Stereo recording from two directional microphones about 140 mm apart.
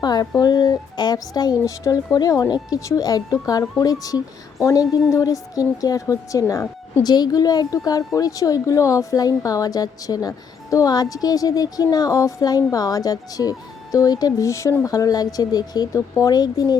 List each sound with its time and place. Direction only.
0.0 s speech: 30° left (ahead or behind)